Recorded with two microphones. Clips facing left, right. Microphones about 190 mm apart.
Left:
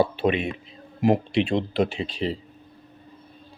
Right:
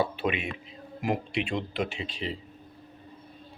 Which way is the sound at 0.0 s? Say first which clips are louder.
Left 6 dB; 30° left (ahead or behind).